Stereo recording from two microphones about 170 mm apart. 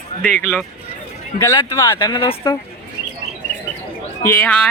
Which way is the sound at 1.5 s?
20° left (ahead or behind).